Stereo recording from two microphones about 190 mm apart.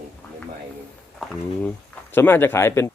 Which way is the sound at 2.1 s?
10° left (ahead or behind).